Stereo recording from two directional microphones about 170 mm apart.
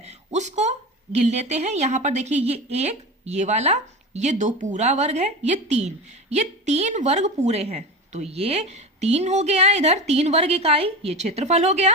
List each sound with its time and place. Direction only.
0.0 s a woman's voice: 40° right (ahead or behind)